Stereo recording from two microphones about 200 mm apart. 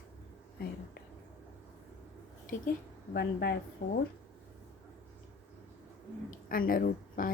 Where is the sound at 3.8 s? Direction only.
45° left (ahead or behind).